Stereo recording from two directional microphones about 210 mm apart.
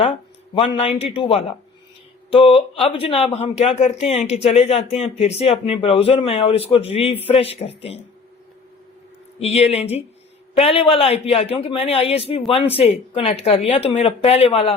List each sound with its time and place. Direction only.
0.0 s speech: 25° left (ahead or behind)
9.4 s speech: 30° left (ahead or behind)